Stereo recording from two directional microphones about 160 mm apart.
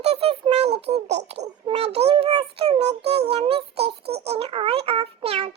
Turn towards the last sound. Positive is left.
turn(degrees=-40)  # may be behind; listen again after turning